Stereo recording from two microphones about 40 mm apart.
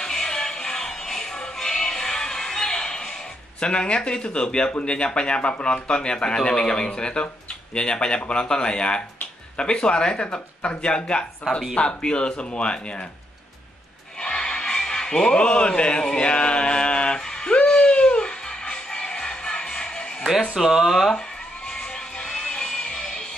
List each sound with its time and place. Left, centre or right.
0.0 s music: centre
3.5 s speech: left
14.2 s music: left
20.5 s speech: centre
21.6 s music: centre